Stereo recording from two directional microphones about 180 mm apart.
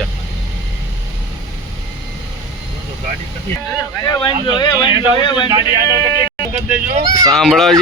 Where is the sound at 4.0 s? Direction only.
25° left (ahead or behind).